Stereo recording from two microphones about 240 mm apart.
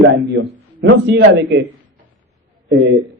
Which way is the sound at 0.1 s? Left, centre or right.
Right.